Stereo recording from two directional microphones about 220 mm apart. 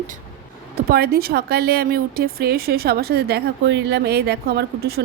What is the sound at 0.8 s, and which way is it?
Speech, 45° right (ahead or behind).